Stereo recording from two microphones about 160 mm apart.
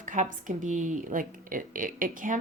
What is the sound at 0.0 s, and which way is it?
A woman's voice, 55° right (ahead or behind).